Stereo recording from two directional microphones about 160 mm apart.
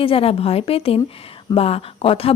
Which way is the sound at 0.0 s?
35° left (ahead or behind).